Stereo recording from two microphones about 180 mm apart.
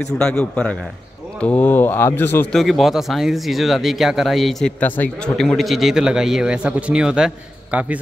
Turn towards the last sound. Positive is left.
turn(degrees=-10)  # may be behind; listen again after turning